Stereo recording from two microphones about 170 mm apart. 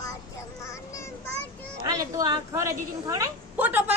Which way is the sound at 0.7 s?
20° left (ahead or behind).